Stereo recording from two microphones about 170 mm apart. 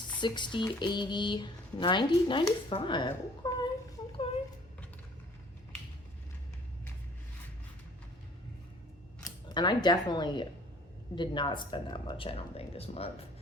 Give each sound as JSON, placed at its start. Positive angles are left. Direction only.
{"t": 0.2, "sound": "speech", "side_deg": 25}
{"t": 9.2, "sound": "speech", "side_deg": 25}